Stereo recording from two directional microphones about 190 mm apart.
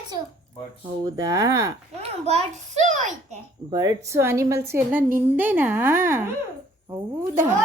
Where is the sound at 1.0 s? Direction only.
20° right (ahead or behind).